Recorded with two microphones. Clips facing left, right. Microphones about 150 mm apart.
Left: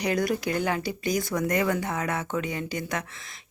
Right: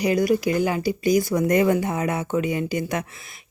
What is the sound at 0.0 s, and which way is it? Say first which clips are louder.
Speech: right 6 dB; 5° right (ahead or behind).